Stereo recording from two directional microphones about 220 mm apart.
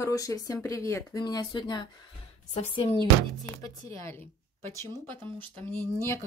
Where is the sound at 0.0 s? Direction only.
15° left (ahead or behind).